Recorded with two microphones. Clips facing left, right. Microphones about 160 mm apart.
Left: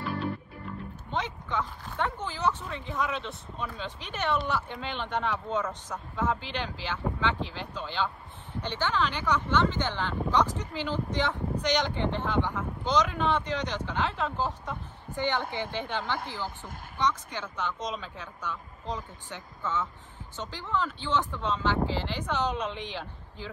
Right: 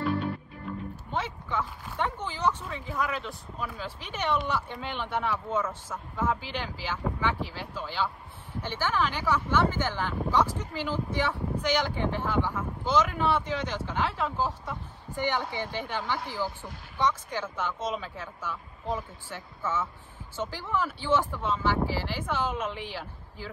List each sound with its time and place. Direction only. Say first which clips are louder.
1.1 s speech: even; 10° right (ahead or behind)
16.2 s speech: right 3 dB; 50° left (ahead or behind)
17.0 s speech: right 2 dB; 10° right (ahead or behind)